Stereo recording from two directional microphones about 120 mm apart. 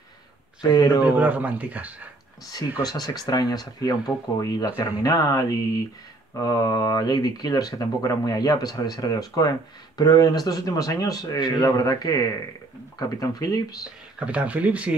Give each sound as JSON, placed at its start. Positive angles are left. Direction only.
{"t": 0.6, "sound": "speech", "side_deg": 35}
{"t": 1.0, "sound": "speech", "side_deg": -15}
{"t": 2.8, "sound": "speech", "side_deg": 35}
{"t": 14.2, "sound": "speech", "side_deg": -10}